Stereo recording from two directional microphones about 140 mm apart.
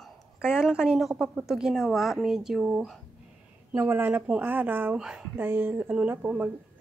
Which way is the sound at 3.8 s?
15° right (ahead or behind).